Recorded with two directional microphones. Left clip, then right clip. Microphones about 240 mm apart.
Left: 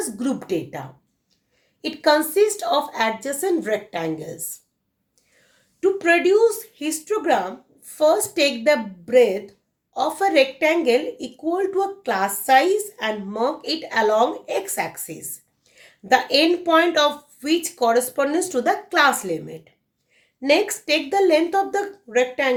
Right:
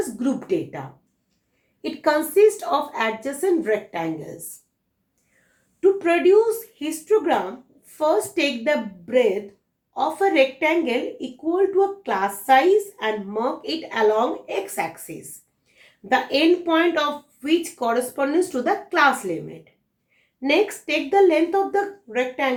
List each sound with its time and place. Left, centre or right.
0.2 s a woman's voice: left
1.8 s a woman's voice: left
5.8 s a woman's voice: left